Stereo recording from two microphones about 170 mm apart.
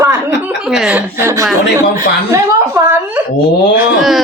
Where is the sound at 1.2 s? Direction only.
15° right (ahead or behind).